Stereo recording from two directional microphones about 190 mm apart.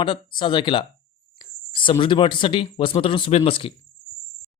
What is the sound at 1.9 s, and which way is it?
Speech, 25° left (ahead or behind).